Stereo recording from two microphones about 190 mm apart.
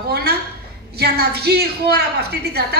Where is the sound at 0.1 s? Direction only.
55° right (ahead or behind).